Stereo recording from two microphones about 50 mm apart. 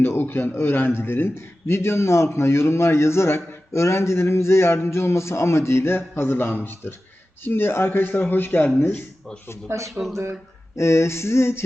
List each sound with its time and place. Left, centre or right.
0.2 s a man's voice: left
9.6 s speech: right
10.8 s a man's voice: left